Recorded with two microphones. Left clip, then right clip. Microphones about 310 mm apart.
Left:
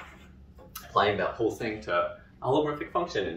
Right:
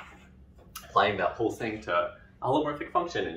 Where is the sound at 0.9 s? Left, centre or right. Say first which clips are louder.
Even; centre.